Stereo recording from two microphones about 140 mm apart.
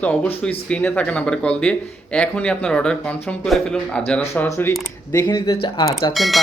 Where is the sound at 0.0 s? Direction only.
10° left (ahead or behind).